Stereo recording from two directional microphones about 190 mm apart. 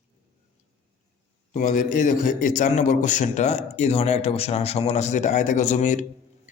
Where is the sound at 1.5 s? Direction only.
45° left (ahead or behind).